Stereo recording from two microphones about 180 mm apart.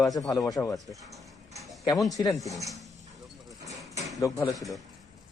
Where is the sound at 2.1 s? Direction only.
20° left (ahead or behind).